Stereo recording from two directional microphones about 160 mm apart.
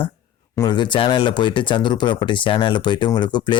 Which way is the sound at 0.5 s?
25° left (ahead or behind).